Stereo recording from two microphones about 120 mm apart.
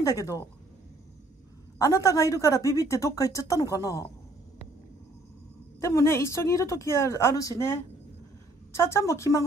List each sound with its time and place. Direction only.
0.0 s speech: 30° left (ahead or behind)
1.8 s speech: 25° left (ahead or behind)
5.8 s speech: 25° left (ahead or behind)